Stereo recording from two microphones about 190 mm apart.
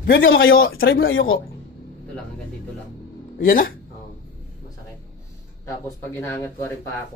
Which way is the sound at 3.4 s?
45° left (ahead or behind).